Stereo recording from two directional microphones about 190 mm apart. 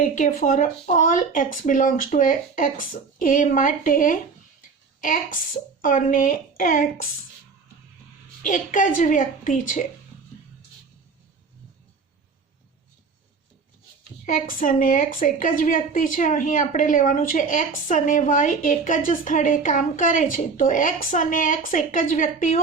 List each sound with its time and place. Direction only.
0.0 s a woman's voice: 40° left (ahead or behind)
8.4 s a woman's voice: 45° left (ahead or behind)
14.3 s a woman's voice: 45° left (ahead or behind)